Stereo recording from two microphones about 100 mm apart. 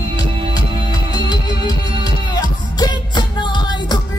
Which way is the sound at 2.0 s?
45° left (ahead or behind).